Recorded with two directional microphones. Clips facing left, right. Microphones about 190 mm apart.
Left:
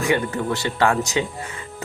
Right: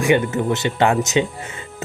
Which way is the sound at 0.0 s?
20° right (ahead or behind).